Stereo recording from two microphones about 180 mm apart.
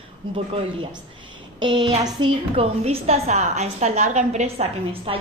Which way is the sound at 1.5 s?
25° right (ahead or behind).